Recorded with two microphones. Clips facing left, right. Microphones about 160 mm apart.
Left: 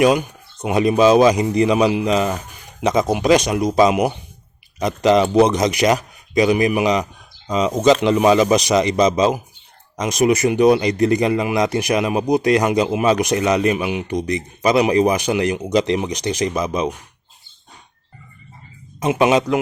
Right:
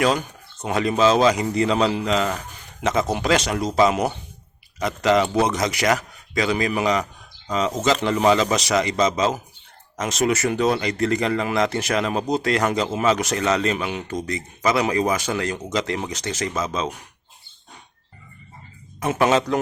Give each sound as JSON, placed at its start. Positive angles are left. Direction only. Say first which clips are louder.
{"t": 0.0, "sound": "a man's voice", "louder": "left 6 dB", "side_deg": 15}
{"t": 18.9, "sound": "speech", "louder": "left 3 dB", "side_deg": 15}